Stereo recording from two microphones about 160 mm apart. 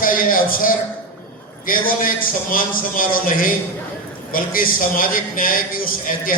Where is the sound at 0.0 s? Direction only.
60° left (ahead or behind).